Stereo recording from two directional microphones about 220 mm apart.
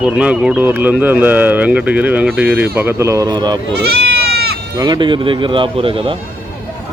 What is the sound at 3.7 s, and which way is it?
Goat, 50° right (ahead or behind).